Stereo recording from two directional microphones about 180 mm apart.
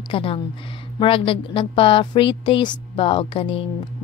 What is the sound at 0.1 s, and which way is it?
A woman's voice, 30° left (ahead or behind).